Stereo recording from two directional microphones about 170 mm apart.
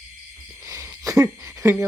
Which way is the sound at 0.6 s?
15° right (ahead or behind).